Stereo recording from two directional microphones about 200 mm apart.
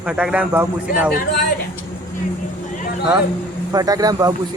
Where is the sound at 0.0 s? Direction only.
5° right (ahead or behind).